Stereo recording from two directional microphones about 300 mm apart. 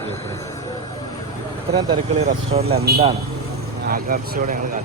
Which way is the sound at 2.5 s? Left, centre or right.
Right.